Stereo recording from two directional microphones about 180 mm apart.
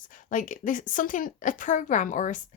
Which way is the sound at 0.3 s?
45° left (ahead or behind).